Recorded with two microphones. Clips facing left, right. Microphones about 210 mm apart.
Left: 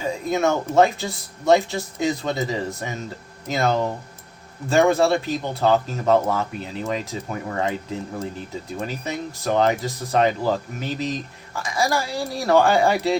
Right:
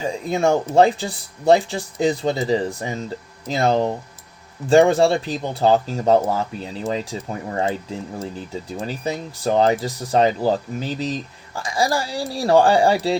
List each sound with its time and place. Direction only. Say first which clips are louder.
0.0 s speech: right 1 dB; 30° right (ahead or behind)
8.8 s speech: right 2 dB; 30° right (ahead or behind)